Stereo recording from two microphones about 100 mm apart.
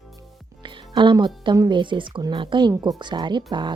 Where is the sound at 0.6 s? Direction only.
55° right (ahead or behind).